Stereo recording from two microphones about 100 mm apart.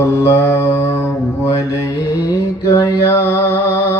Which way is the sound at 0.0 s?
30° left (ahead or behind).